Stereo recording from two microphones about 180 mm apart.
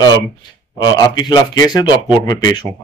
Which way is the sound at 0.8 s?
25° left (ahead or behind).